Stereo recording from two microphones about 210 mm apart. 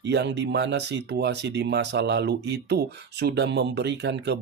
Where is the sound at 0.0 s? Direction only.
55° right (ahead or behind).